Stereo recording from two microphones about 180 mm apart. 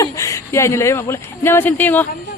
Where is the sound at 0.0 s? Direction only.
15° left (ahead or behind).